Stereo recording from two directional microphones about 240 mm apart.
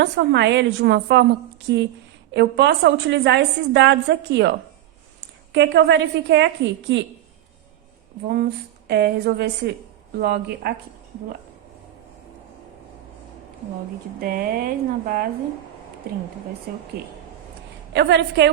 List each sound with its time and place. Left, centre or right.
0.0 s a woman's voice: right
8.9 s speech: right
14.2 s speech: right
17.9 s a woman's voice: right